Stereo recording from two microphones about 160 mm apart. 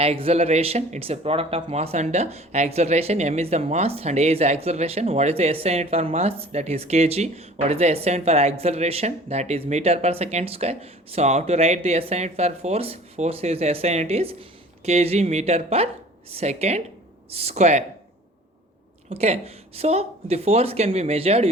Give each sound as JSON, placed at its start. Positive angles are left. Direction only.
{"t": 0.0, "sound": "speech", "side_deg": -40}
{"t": 19.1, "sound": "speech", "side_deg": -40}